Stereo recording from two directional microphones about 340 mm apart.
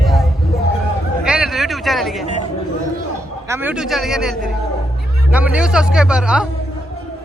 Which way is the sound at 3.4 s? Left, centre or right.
Centre.